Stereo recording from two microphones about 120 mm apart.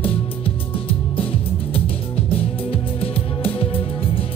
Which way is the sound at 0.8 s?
50° left (ahead or behind).